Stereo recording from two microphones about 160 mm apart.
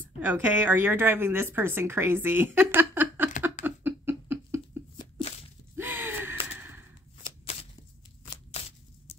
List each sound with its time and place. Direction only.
0.2 s speech: 10° right (ahead or behind)
3.6 s a sound: 10° right (ahead or behind)
5.8 s gasp: 15° right (ahead or behind)
8.5 s tearing: 40° left (ahead or behind)